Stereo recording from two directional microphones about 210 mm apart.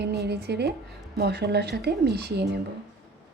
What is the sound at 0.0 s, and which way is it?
A woman's voice, 50° right (ahead or behind).